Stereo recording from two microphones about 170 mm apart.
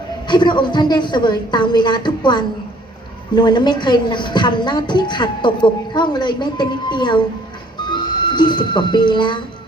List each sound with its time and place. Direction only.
0.3 s a woman's voice: 25° left (ahead or behind)
7.8 s music: 25° left (ahead or behind)